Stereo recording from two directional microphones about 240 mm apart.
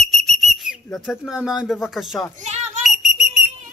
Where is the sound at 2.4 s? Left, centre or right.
Right.